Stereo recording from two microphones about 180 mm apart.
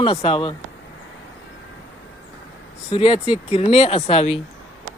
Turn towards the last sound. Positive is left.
turn(degrees=35)  # may be behind; listen again after turning